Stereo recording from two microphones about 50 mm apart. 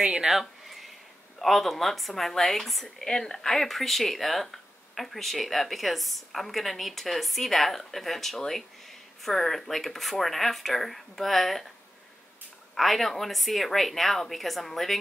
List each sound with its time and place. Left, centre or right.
0.0 s speech: centre
0.3 s a sound: centre
1.4 s speech: centre
12.7 s speech: centre